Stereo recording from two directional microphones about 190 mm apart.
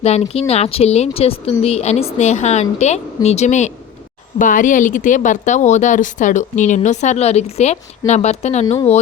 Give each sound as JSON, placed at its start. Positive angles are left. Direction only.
{"t": 0.0, "sound": "speech", "side_deg": 30}